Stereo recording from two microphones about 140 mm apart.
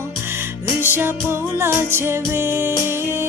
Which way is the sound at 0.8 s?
15° right (ahead or behind).